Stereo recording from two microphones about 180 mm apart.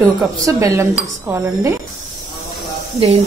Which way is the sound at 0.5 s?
15° right (ahead or behind).